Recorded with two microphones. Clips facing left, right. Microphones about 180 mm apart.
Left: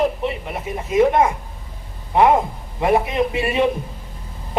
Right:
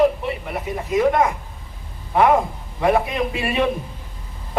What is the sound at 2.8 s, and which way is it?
Speech, 20° left (ahead or behind).